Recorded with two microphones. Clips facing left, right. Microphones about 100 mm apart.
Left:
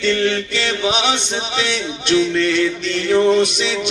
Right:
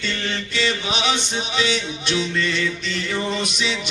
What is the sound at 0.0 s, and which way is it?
Chant, 65° left (ahead or behind).